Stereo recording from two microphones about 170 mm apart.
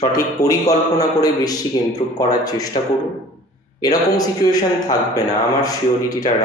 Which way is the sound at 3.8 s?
20° left (ahead or behind).